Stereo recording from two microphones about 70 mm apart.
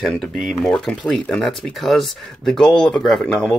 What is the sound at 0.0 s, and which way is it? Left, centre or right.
Speech, centre.